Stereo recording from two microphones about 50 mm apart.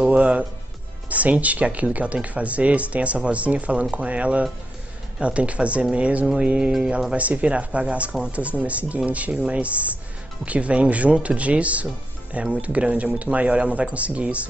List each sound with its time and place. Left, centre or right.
0.0 s speech: right
6.2 s music: centre
7.2 s speech: right